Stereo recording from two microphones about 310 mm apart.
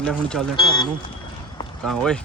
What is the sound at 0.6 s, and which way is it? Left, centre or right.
Speech, centre.